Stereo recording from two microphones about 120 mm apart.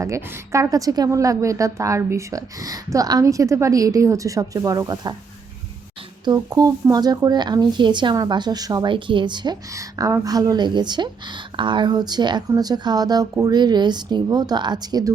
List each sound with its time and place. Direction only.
0.0 s speech: 25° right (ahead or behind)
6.2 s a woman's voice: 30° right (ahead or behind)